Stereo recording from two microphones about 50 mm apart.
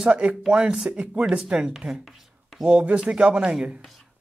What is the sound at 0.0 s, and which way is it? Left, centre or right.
Speech, right.